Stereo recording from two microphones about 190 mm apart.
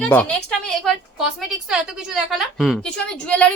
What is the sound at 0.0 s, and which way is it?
A woman's voice, 5° left (ahead or behind).